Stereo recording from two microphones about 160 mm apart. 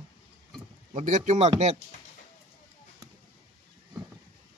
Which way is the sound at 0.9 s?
50° right (ahead or behind).